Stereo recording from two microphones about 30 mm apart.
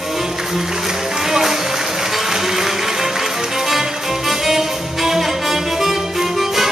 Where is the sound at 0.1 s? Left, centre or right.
Centre.